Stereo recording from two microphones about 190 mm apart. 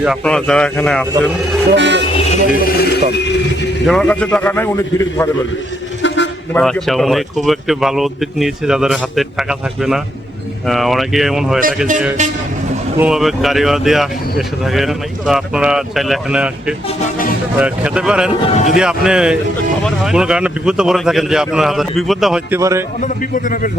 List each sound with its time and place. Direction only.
0.0 s speech: centre (ahead or behind)
1.7 s music: 70° right (ahead or behind)
2.3 s a man's voice: 50° left (ahead or behind)
3.8 s a man's voice: 5° left (ahead or behind)
6.0 s a sound: 75° left (ahead or behind)
6.5 s speech: 5° left (ahead or behind)
13.0 s speech: 5° right (ahead or behind)
18.5 s speech: 40° left (ahead or behind)
18.8 s speech: 5° right (ahead or behind)
22.5 s speech: 15° right (ahead or behind)
23.0 s a man's voice: 45° left (ahead or behind)